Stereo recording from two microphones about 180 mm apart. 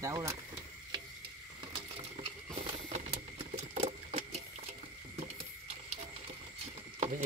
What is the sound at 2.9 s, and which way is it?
Sewing machine, 40° right (ahead or behind).